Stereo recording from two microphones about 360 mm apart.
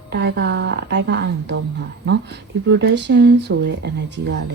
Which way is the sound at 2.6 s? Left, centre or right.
Right.